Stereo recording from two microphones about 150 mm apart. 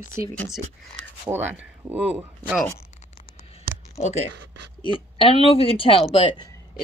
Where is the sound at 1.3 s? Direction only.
20° right (ahead or behind).